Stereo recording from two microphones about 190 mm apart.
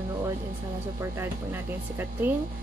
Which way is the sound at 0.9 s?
15° right (ahead or behind).